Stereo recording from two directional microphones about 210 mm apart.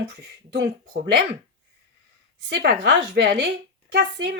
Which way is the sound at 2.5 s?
50° right (ahead or behind).